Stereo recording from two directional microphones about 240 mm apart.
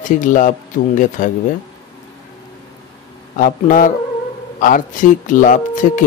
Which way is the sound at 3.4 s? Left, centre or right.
Left.